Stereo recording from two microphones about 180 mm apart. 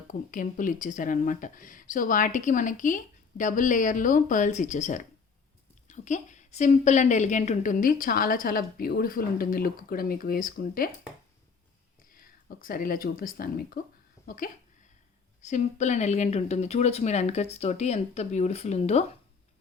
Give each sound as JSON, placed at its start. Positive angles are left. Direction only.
{"t": 0.1, "sound": "a woman's voice", "side_deg": 50}
{"t": 12.6, "sound": "a woman's voice", "side_deg": 55}